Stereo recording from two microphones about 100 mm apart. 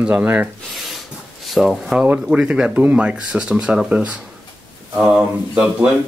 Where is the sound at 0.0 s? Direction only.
10° right (ahead or behind).